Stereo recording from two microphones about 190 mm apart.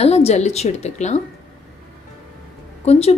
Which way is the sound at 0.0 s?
35° left (ahead or behind).